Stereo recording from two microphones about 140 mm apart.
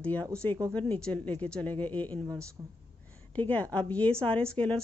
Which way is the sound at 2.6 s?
30° right (ahead or behind).